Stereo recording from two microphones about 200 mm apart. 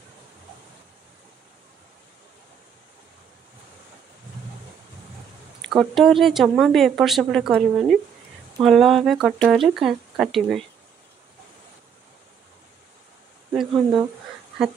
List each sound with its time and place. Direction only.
5.6 s speech: centre (ahead or behind)
13.5 s speech: centre (ahead or behind)